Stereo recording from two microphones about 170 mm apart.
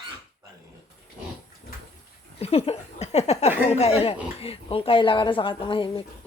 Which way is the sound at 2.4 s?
35° left (ahead or behind).